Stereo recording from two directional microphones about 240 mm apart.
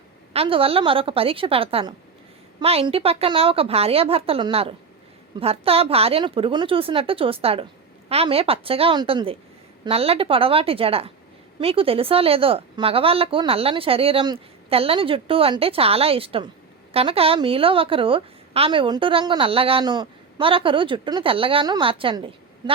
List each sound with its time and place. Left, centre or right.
0.3 s a woman's voice: right